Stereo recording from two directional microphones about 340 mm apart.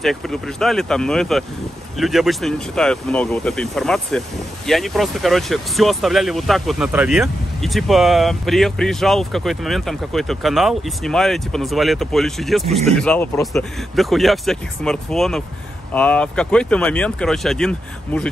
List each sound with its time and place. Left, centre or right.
0.0 s speech: centre
12.6 s speech: centre
12.9 s speech: centre